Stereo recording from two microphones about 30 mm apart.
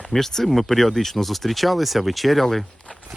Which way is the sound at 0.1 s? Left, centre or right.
Centre.